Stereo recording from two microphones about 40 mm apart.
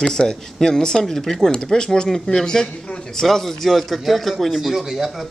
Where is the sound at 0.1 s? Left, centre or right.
Centre.